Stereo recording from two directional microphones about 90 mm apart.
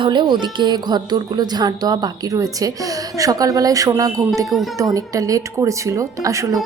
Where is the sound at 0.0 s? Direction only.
60° right (ahead or behind).